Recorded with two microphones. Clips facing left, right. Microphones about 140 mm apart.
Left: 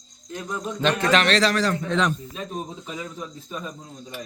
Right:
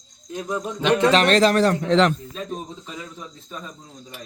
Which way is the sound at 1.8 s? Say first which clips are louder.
Right 6 dB; 80° right.